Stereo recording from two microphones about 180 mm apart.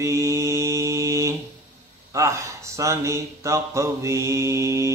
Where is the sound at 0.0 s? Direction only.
15° right (ahead or behind).